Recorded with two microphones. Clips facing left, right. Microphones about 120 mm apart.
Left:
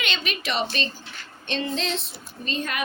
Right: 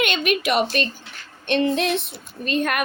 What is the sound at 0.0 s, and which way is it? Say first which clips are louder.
A woman's voice: right 9 dB; 55° right (ahead or behind).